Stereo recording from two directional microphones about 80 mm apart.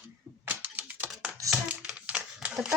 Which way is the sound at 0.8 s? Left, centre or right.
Right.